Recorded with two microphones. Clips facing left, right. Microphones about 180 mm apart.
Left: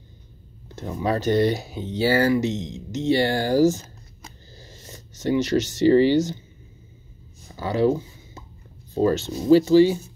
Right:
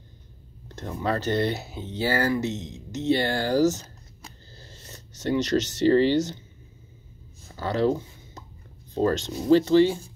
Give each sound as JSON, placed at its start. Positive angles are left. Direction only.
{"t": 0.7, "sound": "speech", "side_deg": 5}
{"t": 7.4, "sound": "a sound", "side_deg": 10}
{"t": 8.9, "sound": "speech", "side_deg": 5}